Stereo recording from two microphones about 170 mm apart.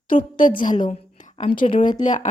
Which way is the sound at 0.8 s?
45° left (ahead or behind).